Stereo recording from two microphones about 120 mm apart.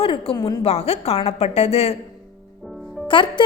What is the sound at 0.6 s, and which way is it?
A woman's voice, 55° left (ahead or behind).